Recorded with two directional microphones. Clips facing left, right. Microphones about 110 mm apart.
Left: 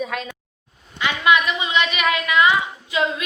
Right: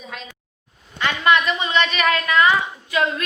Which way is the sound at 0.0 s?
60° left (ahead or behind).